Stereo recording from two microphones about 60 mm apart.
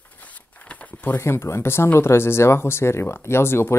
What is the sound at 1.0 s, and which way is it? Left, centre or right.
Speech, left.